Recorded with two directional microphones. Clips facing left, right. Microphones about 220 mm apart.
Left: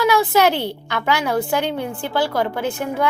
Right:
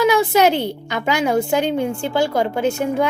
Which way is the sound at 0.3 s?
20° right (ahead or behind).